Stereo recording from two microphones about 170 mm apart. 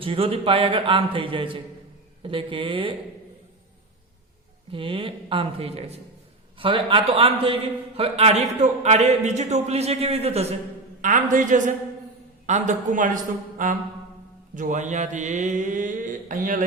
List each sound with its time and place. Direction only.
0.0 s a man's voice: 35° right (ahead or behind)
4.7 s a man's voice: 30° right (ahead or behind)
11.0 s mantra: 50° right (ahead or behind)